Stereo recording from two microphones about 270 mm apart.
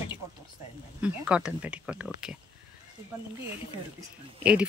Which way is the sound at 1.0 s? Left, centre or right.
Centre.